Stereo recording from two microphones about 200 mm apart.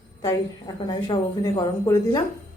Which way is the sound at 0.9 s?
20° left (ahead or behind).